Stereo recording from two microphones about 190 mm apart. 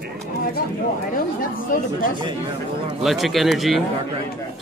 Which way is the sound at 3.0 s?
Centre (ahead or behind).